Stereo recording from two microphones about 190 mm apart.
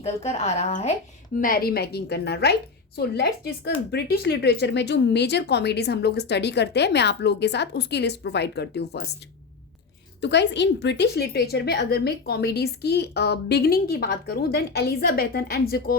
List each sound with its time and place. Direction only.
0.0 s speech: 35° left (ahead or behind)
1.4 s a woman's voice: 50° left (ahead or behind)
10.2 s a woman's voice: 65° left (ahead or behind)